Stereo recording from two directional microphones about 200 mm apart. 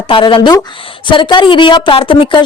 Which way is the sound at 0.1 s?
25° left (ahead or behind).